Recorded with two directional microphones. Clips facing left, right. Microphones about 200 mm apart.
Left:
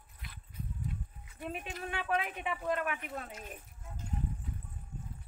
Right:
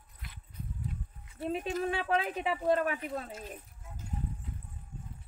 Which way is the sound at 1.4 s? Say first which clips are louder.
Right 8 dB; 35° right (ahead or behind).